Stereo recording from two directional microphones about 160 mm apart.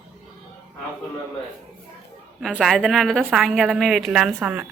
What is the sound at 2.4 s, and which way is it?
A woman's voice, centre (ahead or behind).